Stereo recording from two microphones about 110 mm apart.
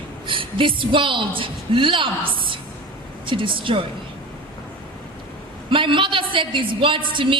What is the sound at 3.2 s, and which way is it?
Speech, 50° right (ahead or behind).